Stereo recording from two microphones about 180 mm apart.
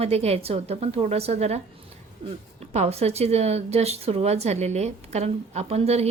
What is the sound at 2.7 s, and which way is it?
A woman's voice, 35° right (ahead or behind).